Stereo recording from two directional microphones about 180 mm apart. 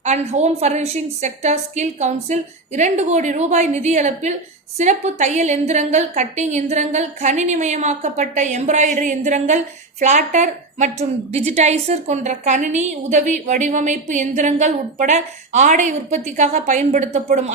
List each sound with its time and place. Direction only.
0.0 s a woman's voice: 40° right (ahead or behind)